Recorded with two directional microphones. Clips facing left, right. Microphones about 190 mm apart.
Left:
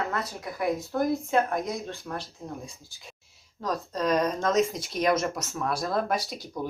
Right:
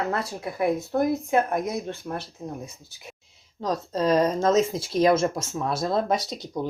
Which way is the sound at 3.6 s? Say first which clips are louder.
Right 4 dB; 25° right (ahead or behind).